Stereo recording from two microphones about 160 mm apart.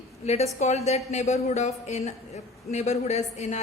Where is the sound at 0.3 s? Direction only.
40° left (ahead or behind).